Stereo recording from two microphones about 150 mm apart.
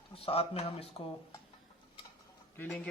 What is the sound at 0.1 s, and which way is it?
Speech, 40° left (ahead or behind).